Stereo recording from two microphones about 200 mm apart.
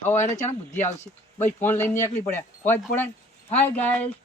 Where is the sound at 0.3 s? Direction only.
35° left (ahead or behind).